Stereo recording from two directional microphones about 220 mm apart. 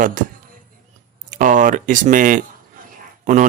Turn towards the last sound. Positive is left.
turn(degrees=-35)  # may be behind; listen again after turning